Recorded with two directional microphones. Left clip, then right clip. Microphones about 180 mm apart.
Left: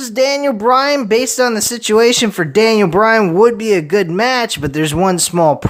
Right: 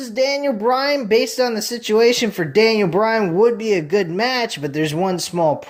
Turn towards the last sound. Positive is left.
turn(degrees=35)  # may be behind; listen again after turning